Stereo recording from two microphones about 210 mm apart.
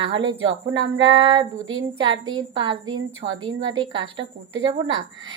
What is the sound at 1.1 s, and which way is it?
A woman's voice, 20° right (ahead or behind).